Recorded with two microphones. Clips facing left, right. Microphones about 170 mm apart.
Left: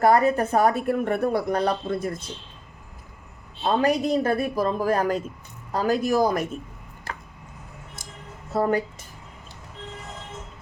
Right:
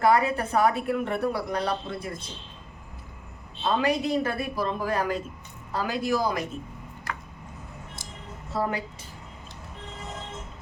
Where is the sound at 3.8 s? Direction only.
45° left (ahead or behind).